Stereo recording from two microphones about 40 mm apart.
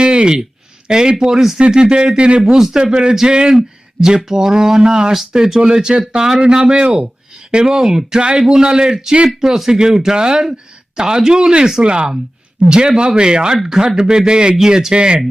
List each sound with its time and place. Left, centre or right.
0.0 s a sound: right
0.9 s speech: centre
2.5 s speech: centre
2.9 s speech: right